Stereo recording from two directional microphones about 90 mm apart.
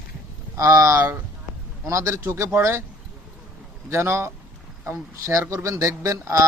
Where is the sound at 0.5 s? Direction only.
40° right (ahead or behind).